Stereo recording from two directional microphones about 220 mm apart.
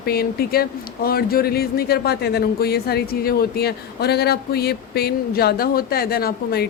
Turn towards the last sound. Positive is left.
turn(degrees=45)  # may be behind; listen again after turning